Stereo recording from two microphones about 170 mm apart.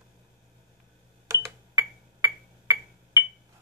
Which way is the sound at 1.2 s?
15° right (ahead or behind).